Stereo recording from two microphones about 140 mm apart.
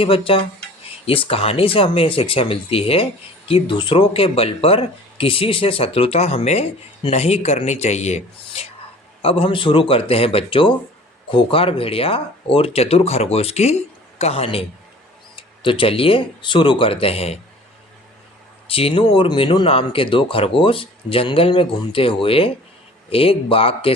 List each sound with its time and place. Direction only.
0.0 s speech: 40° left (ahead or behind)
9.2 s speech: 40° left (ahead or behind)
18.7 s speech: 45° left (ahead or behind)